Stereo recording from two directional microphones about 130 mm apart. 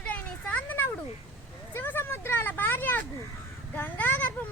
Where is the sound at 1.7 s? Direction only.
15° left (ahead or behind).